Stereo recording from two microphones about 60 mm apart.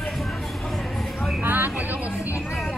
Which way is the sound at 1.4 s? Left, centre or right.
Right.